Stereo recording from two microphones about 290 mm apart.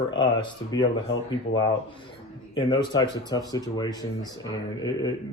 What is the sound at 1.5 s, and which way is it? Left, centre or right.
Speech, left.